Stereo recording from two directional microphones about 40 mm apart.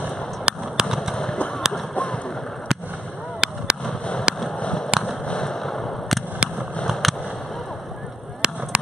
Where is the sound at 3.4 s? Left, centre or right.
Right.